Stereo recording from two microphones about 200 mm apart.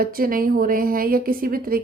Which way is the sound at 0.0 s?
45° right (ahead or behind).